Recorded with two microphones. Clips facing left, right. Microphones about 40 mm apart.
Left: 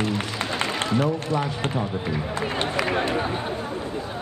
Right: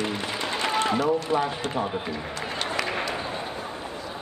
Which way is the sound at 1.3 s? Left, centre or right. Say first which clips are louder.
Right 1 dB; right.